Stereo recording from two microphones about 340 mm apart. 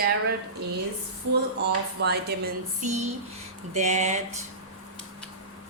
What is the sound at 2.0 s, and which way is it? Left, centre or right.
Speech, right.